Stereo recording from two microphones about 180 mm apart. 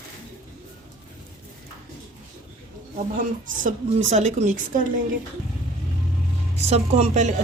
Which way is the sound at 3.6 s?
40° right (ahead or behind).